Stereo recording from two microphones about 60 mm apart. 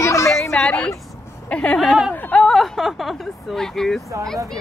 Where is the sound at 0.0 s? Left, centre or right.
Left.